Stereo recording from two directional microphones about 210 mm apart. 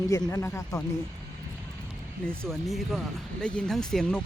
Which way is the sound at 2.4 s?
Centre (ahead or behind).